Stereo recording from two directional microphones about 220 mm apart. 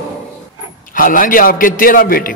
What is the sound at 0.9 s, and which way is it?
A man's voice, 40° left (ahead or behind).